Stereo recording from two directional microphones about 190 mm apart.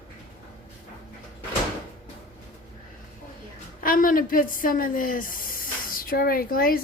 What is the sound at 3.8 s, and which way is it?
Speech, 50° left (ahead or behind).